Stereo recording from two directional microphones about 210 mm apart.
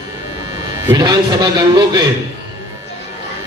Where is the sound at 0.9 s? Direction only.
20° right (ahead or behind).